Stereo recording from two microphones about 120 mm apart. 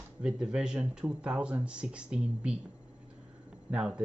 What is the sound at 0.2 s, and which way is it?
Speech, 5° right (ahead or behind).